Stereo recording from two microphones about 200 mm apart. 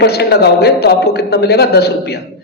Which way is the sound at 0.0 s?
55° left (ahead or behind).